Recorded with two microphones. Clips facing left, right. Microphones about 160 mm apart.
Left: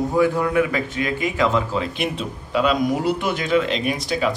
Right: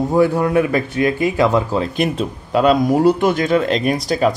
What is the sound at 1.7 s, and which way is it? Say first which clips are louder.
Speech: right 5 dB; 40° right (ahead or behind).